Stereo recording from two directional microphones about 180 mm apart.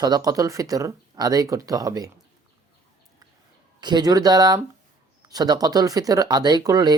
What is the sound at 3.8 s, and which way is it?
Speech, 25° right (ahead or behind).